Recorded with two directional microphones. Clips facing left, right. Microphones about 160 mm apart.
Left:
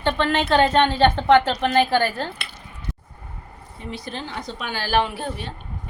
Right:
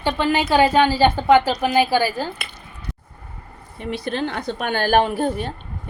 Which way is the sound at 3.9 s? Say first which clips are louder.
Right 8 dB; 65° right (ahead or behind).